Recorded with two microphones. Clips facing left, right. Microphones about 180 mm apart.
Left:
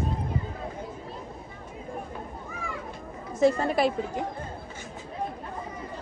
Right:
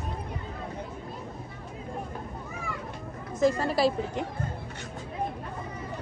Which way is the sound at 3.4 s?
35° right (ahead or behind).